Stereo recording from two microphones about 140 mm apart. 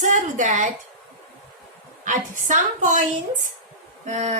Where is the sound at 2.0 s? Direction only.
65° right (ahead or behind).